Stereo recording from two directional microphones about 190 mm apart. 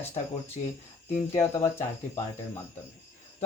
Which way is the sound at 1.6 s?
15° left (ahead or behind).